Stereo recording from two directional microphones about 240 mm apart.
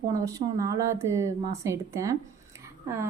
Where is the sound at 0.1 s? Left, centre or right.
Centre.